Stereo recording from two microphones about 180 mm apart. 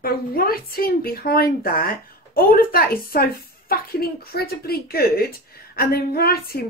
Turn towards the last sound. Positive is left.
turn(degrees=60)  # may be behind; listen again after turning